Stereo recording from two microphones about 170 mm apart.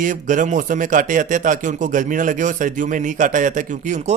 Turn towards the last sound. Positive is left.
turn(degrees=-45)  # may be behind; listen again after turning